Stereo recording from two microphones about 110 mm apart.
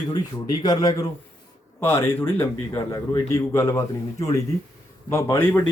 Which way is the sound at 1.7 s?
20° left (ahead or behind).